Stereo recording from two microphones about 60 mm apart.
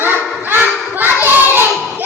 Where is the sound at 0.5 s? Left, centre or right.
Right.